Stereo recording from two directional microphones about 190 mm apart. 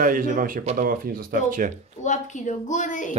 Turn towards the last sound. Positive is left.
turn(degrees=40)  # may be behind; listen again after turning